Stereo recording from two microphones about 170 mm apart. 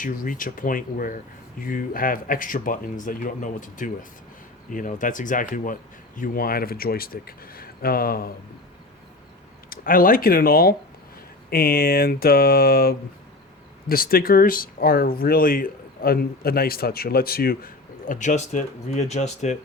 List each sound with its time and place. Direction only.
0.0 s speech: 55° left (ahead or behind)
9.6 s speech: 55° left (ahead or behind)
18.1 s speech: 45° left (ahead or behind)